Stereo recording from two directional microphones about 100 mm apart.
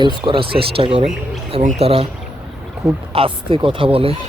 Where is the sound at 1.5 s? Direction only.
75° right (ahead or behind).